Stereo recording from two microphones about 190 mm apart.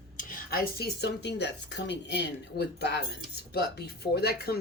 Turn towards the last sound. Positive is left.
turn(degrees=55)  # may be behind; listen again after turning